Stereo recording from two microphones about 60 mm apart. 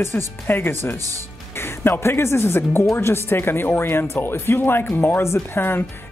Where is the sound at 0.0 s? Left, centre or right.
Left.